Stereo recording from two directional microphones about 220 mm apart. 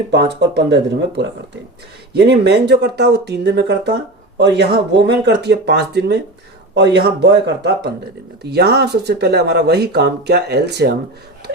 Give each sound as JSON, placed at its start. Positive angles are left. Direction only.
{"t": 0.1, "sound": "speech", "side_deg": -50}